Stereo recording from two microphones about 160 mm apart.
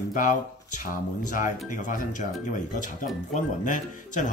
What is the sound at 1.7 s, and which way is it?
Speech, 55° left (ahead or behind).